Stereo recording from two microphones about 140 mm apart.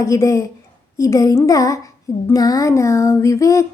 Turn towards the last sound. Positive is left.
turn(degrees=25)  # may be behind; listen again after turning